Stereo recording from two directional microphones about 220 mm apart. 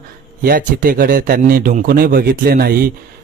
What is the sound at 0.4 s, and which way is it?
A man's voice, 40° right (ahead or behind).